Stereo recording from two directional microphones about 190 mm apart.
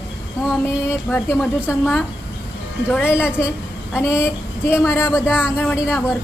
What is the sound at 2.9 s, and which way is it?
Speech, 10° left (ahead or behind).